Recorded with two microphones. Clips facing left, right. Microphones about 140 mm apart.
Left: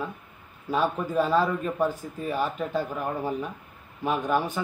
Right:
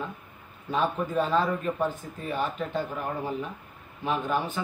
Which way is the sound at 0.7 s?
10° left (ahead or behind).